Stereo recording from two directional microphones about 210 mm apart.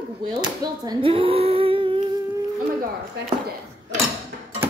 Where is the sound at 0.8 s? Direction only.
20° right (ahead or behind).